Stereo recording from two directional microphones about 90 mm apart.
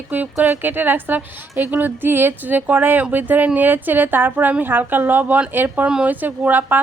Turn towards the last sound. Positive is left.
turn(degrees=-20)  # may be behind; listen again after turning